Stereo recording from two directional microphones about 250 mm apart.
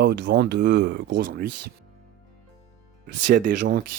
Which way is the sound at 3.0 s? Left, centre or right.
Right.